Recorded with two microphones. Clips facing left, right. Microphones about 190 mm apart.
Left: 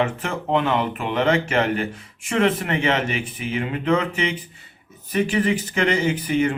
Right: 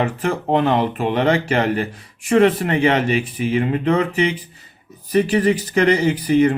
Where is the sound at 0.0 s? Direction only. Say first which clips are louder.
Right 3 dB; 35° right (ahead or behind).